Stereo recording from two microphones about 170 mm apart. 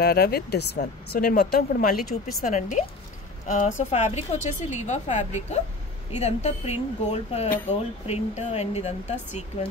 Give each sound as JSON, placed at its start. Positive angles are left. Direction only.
{"t": 0.0, "sound": "speech", "side_deg": 65}
{"t": 0.7, "sound": "a woman's voice", "side_deg": 55}
{"t": 2.4, "sound": "a woman's voice", "side_deg": 45}